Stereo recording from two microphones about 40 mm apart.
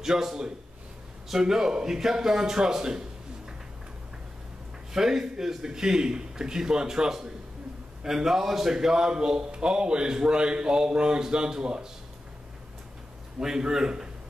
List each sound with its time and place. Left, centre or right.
0.0 s speech: centre
4.9 s a man's voice: centre
13.4 s speech: centre